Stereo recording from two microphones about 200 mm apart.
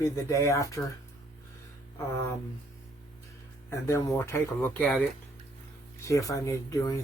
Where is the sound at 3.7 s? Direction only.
15° left (ahead or behind).